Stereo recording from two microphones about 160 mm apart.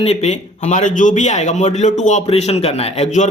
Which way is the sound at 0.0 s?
40° left (ahead or behind).